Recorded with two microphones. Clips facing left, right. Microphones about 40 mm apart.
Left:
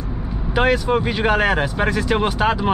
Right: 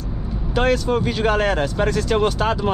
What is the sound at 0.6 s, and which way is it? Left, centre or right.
Speech, centre.